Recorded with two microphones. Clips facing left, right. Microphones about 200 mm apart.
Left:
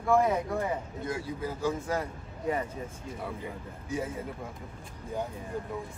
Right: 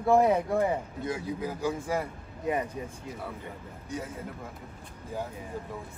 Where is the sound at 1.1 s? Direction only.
15° right (ahead or behind).